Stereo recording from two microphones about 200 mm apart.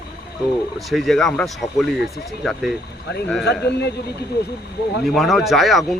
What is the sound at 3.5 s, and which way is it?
Speech, 55° left (ahead or behind).